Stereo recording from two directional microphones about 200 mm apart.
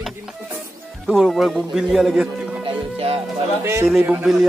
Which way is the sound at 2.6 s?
30° right (ahead or behind).